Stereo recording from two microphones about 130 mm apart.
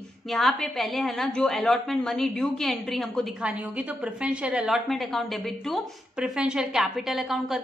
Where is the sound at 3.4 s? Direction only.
10° right (ahead or behind).